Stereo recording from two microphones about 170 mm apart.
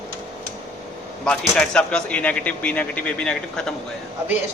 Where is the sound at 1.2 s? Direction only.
5° left (ahead or behind).